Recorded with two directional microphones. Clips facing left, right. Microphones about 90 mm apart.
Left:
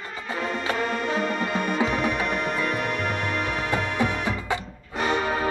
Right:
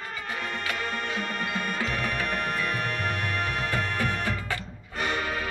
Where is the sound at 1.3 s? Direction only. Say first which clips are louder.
Left 5 dB; 45° left (ahead or behind).